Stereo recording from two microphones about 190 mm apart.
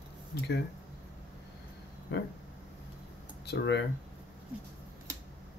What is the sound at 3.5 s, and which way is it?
Speech, 65° left (ahead or behind).